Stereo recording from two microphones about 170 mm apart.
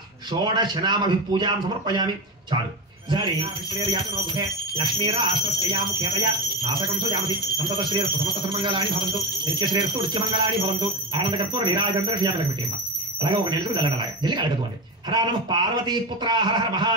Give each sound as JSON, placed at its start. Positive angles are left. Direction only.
{"t": 0.3, "sound": "speech", "side_deg": -25}
{"t": 3.1, "sound": "speech", "side_deg": -25}